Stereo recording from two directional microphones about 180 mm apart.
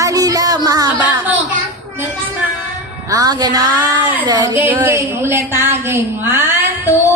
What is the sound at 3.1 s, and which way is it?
A woman's voice, 20° right (ahead or behind).